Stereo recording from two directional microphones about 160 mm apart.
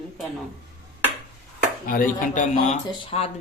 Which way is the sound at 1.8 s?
60° left (ahead or behind).